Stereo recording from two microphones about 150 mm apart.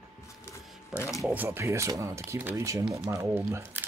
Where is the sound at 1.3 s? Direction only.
15° right (ahead or behind).